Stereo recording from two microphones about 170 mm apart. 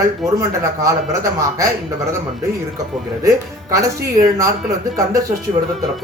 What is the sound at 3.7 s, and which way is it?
Speech, 20° right (ahead or behind).